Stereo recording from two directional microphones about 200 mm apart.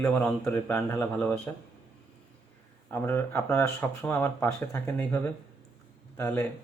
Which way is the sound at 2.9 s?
10° left (ahead or behind).